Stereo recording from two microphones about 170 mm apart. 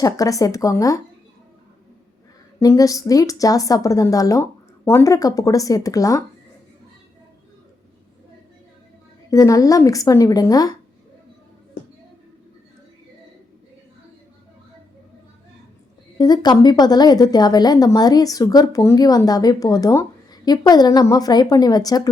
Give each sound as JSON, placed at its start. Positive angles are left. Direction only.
{"t": 0.0, "sound": "a woman's voice", "side_deg": 20}
{"t": 2.6, "sound": "a woman's voice", "side_deg": 20}
{"t": 9.3, "sound": "a woman's voice", "side_deg": 20}
{"t": 16.1, "sound": "a woman's voice", "side_deg": 25}